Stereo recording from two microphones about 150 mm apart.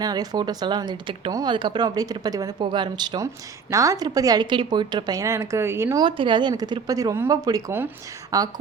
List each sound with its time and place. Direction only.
0.0 s speech: 25° right (ahead or behind)
6.0 s speech: 35° right (ahead or behind)